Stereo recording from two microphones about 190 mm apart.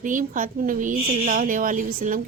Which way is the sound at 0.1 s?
45° right (ahead or behind).